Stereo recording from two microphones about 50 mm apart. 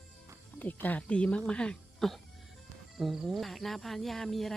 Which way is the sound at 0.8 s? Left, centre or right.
Left.